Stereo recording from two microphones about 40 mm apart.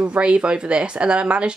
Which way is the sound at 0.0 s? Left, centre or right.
Right.